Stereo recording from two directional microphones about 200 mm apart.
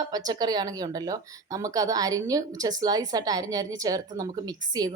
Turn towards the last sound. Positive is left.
turn(degrees=-20)  # may be behind; listen again after turning